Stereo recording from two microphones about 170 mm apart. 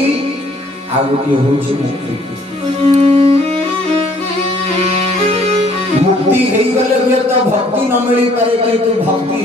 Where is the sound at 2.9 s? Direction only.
35° right (ahead or behind).